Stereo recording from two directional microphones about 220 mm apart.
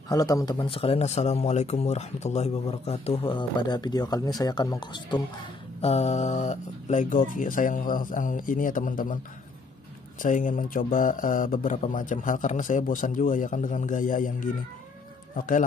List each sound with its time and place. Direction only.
0.1 s a man's voice: 15° left (ahead or behind); by 9.2 s 40° left (ahead or behind)
10.2 s a man's voice: 35° left (ahead or behind)